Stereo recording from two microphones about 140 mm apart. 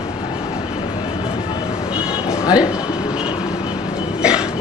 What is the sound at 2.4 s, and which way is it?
Speech, 25° left (ahead or behind).